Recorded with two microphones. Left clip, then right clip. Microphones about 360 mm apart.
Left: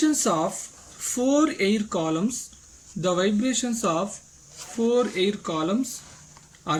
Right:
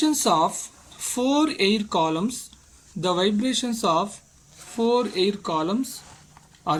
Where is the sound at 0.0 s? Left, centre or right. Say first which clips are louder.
Right 3 dB; centre.